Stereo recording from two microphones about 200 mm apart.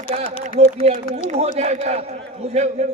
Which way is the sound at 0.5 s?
30° right (ahead or behind).